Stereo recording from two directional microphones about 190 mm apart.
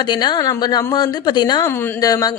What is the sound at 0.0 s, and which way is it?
A woman's voice, 25° left (ahead or behind).